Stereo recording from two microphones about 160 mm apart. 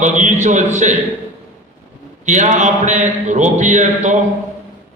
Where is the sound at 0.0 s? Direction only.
50° right (ahead or behind).